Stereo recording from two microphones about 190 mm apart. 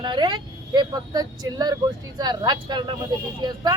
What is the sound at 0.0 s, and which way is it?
Speech, 25° right (ahead or behind).